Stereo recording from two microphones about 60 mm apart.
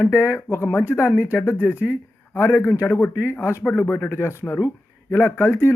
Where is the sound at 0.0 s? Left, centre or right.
Left.